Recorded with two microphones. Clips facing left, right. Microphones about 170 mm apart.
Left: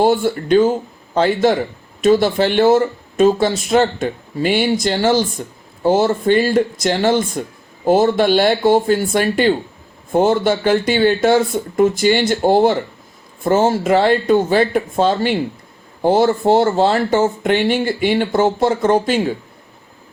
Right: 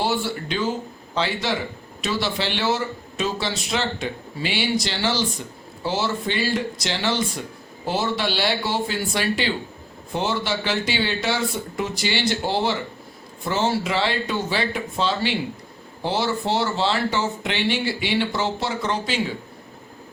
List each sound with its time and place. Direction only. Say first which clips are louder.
0.0 s speech: left 9 dB; 50° left (ahead or behind)